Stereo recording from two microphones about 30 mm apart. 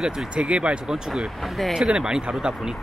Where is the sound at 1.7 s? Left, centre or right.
Right.